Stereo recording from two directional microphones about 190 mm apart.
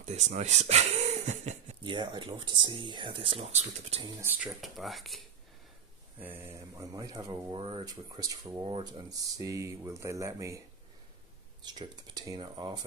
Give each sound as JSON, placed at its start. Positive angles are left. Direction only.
{"t": 0.0, "sound": "speech", "side_deg": -35}
{"t": 1.8, "sound": "speech", "side_deg": -25}
{"t": 4.0, "sound": "speech", "side_deg": -10}
{"t": 6.1, "sound": "speech", "side_deg": -10}
{"t": 9.4, "sound": "speech", "side_deg": -15}
{"t": 11.6, "sound": "speech", "side_deg": -20}